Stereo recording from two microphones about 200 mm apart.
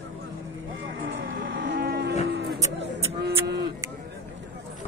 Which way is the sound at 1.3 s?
45° right (ahead or behind).